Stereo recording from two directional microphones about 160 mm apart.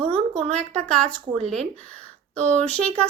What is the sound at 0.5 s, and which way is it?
A woman's voice, 5° left (ahead or behind).